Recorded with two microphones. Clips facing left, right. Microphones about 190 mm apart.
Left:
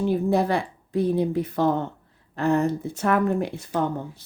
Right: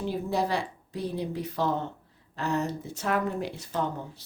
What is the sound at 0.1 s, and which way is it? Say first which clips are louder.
Speech: left 5 dB; 55° left (ahead or behind).